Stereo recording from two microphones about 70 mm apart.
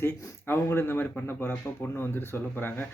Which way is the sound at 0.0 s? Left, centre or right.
Left.